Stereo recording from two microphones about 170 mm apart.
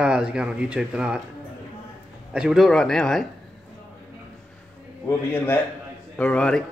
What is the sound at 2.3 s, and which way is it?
Speech, 5° right (ahead or behind).